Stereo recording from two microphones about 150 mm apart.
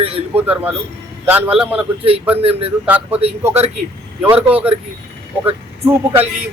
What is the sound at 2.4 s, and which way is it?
Speech, 40° right (ahead or behind).